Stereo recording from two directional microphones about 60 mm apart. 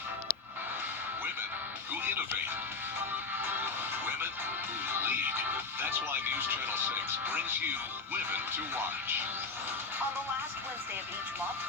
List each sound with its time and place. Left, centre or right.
3.4 s music: right
4.9 s music: right
8.3 s speech: right